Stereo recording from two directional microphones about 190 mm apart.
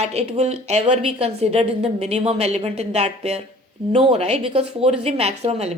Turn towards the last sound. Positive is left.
turn(degrees=-35)  # may be behind; listen again after turning